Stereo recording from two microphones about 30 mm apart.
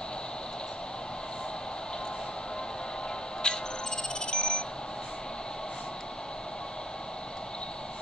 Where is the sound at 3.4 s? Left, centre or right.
Left.